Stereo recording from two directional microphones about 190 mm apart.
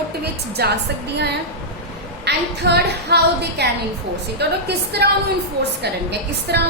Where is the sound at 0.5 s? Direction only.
60° right (ahead or behind).